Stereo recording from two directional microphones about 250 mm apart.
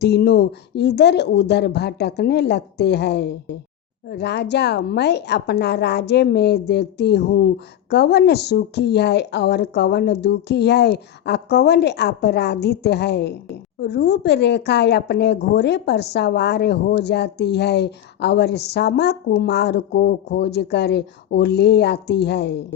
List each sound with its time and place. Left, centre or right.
0.0 s a woman's voice: left